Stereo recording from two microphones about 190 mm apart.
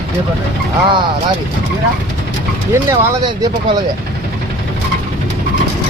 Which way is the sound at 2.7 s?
15° right (ahead or behind).